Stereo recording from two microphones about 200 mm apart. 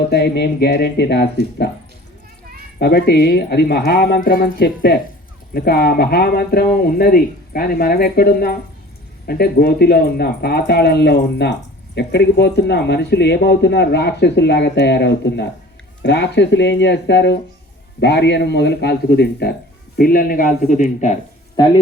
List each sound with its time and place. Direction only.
0.1 s speech: 55° left (ahead or behind)
2.7 s speech: 50° left (ahead or behind)